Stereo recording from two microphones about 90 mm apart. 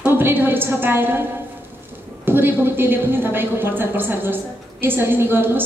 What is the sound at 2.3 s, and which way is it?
A woman's voice, 25° right (ahead or behind).